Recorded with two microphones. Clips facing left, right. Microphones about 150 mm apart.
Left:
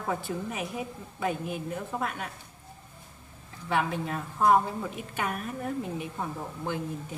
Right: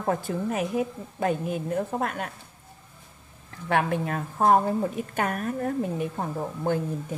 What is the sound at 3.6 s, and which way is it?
A woman's voice, 60° right (ahead or behind).